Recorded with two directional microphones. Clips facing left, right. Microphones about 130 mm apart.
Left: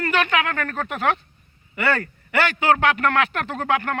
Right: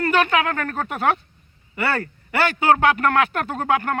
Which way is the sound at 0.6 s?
15° right (ahead or behind).